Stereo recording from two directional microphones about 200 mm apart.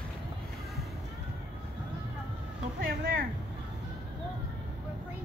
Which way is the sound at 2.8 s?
45° right (ahead or behind).